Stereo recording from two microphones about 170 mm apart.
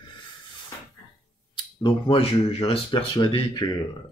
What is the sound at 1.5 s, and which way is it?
Speech, 30° left (ahead or behind).